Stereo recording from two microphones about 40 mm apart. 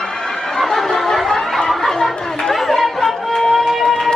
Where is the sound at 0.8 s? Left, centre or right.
Centre.